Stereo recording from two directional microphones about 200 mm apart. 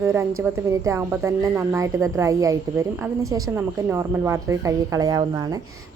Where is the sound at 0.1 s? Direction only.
10° right (ahead or behind).